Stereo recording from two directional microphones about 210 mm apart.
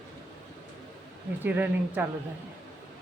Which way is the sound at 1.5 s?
10° right (ahead or behind).